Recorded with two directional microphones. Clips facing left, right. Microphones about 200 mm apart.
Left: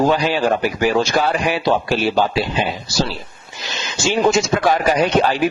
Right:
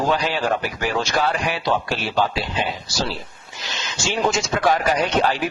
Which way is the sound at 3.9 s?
5° left (ahead or behind).